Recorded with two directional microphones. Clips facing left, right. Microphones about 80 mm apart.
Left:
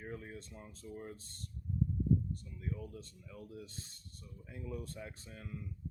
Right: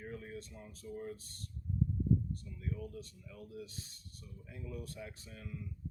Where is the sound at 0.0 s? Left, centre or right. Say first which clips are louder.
Right 1 dB; left.